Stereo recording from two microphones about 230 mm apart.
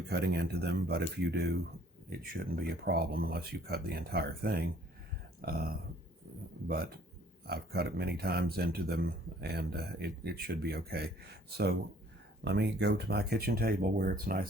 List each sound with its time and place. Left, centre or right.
0.1 s speech: right
7.4 s speech: right
12.5 s speech: right